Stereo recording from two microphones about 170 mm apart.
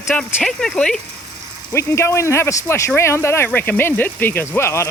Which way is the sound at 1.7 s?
15° left (ahead or behind).